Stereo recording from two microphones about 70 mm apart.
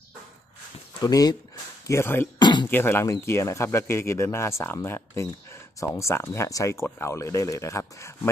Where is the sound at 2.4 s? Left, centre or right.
Left.